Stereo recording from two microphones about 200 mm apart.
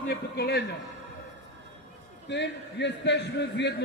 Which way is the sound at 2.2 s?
60° left (ahead or behind).